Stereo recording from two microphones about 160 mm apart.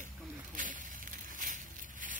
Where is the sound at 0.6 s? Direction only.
55° right (ahead or behind).